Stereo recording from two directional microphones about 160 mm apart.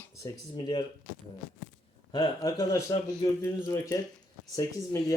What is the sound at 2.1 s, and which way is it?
Speech, 25° left (ahead or behind).